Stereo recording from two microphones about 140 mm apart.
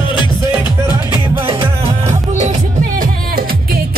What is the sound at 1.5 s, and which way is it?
Music, 40° right (ahead or behind).